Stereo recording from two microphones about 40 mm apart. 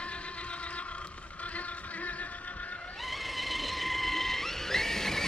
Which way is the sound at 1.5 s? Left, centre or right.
Left.